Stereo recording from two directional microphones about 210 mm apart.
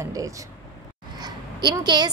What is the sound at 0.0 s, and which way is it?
A woman's voice, 15° right (ahead or behind).